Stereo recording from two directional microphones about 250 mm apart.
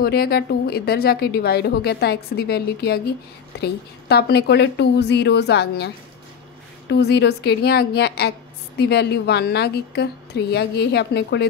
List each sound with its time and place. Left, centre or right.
0.0 s a woman's voice: left
6.9 s a woman's voice: left